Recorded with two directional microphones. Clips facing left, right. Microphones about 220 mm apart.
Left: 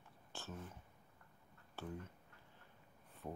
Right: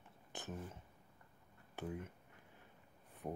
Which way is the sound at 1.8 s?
20° right (ahead or behind).